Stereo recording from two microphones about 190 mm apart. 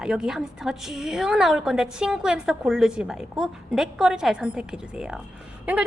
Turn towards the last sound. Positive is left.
turn(degrees=-10)  # may be behind; listen again after turning